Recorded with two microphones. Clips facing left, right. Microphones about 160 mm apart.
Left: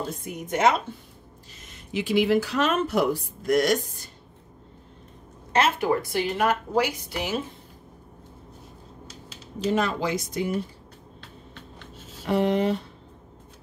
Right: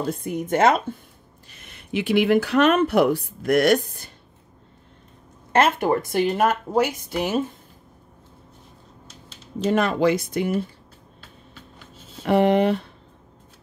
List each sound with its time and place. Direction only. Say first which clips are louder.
0.0 s speech: right 6 dB; 60° right (ahead or behind)
5.5 s a woman's voice: right 3 dB; 50° right (ahead or behind)
9.7 s speech: right 5 dB; 60° right (ahead or behind)
12.3 s speech: right 5 dB; 60° right (ahead or behind)